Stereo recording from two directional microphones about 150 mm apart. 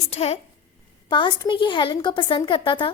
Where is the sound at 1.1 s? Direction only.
30° left (ahead or behind).